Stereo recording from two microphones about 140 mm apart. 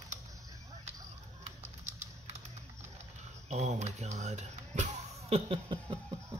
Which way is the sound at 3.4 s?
55° right (ahead or behind).